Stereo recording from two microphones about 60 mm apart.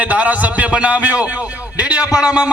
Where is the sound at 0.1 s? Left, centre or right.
Right.